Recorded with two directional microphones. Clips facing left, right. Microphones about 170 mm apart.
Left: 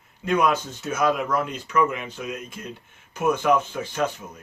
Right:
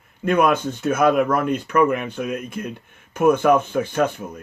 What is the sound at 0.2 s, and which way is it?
Speech, 55° right (ahead or behind).